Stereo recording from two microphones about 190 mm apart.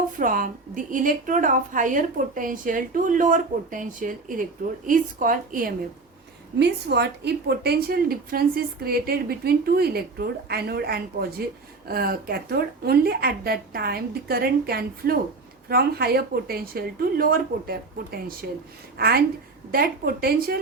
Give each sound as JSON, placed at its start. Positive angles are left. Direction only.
{"t": 0.2, "sound": "a woman's voice", "side_deg": -45}
{"t": 6.6, "sound": "a woman's voice", "side_deg": -60}